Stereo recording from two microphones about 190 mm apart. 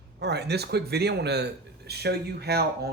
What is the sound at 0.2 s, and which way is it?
Speech, 60° right (ahead or behind).